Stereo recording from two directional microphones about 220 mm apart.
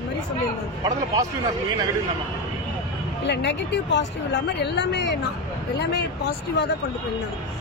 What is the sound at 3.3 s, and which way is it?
Speech, 50° left (ahead or behind).